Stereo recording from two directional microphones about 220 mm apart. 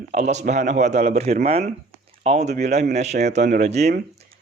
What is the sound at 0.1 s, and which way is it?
Speech, 30° right (ahead or behind).